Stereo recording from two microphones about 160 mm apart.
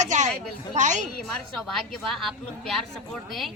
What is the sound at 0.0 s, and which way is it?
Speech, 50° right (ahead or behind).